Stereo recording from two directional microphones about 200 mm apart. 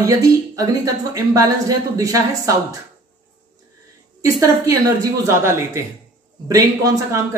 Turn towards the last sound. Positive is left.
turn(degrees=-15)  # may be behind; listen again after turning